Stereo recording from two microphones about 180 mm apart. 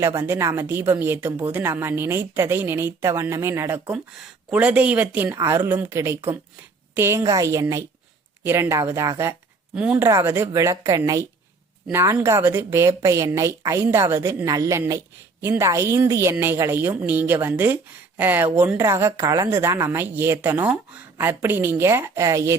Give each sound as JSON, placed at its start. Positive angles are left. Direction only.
{"t": 0.0, "sound": "a woman's voice", "side_deg": -15}
{"t": 3.9, "sound": "a woman's voice", "side_deg": -5}
{"t": 9.7, "sound": "a woman's voice", "side_deg": -5}